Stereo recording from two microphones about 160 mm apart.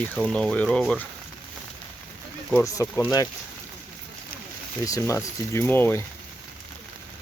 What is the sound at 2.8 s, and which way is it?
Speech, 20° left (ahead or behind).